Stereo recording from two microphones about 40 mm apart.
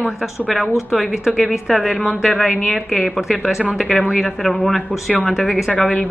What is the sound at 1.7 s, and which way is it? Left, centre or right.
A woman's voice, centre.